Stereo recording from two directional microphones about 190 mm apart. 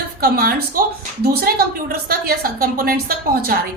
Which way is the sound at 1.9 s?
50° right (ahead or behind).